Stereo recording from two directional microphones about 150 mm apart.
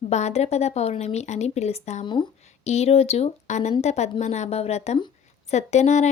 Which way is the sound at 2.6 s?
45° left (ahead or behind).